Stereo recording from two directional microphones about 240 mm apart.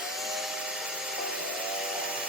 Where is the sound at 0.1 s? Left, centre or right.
Centre.